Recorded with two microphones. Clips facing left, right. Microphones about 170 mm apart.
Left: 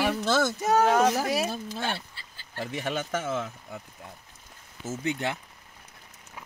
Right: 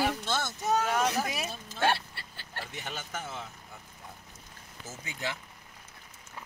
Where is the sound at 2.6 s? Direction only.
80° left.